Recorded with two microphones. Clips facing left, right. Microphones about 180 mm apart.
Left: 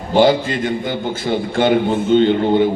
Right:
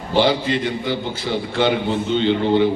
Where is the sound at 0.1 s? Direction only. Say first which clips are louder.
Left 4 dB; 50° left (ahead or behind).